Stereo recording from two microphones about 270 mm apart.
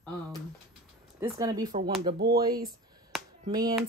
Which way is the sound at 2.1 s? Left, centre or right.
Right.